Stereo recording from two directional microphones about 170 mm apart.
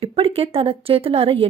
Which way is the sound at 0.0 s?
35° right (ahead or behind).